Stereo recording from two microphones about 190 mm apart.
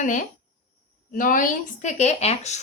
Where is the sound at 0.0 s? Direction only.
40° left (ahead or behind).